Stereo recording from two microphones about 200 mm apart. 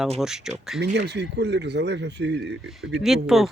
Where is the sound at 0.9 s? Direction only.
60° right (ahead or behind).